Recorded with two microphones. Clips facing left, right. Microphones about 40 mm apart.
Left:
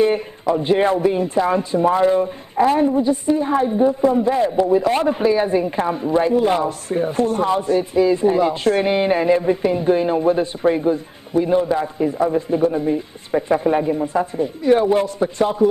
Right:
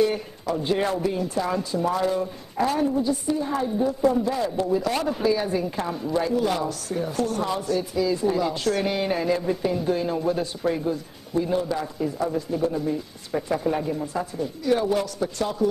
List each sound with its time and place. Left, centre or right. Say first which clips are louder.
0.0 s a man's voice: left 6 dB; left